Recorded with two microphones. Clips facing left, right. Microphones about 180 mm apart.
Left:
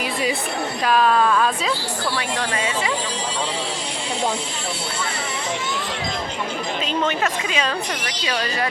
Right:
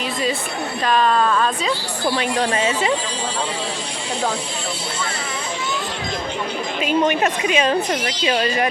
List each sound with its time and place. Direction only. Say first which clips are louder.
0.9 s speech: even; 5° left (ahead or behind)
2.0 s speech: right 6 dB; 25° right (ahead or behind)
6.8 s speech: right 6 dB; 15° right (ahead or behind)